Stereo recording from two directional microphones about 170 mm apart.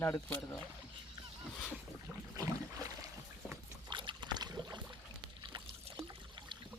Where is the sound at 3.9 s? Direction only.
30° right (ahead or behind).